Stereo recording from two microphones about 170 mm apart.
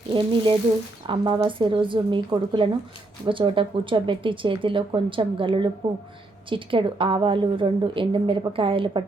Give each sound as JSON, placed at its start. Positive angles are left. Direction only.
{"t": 0.1, "sound": "a woman's voice", "side_deg": -30}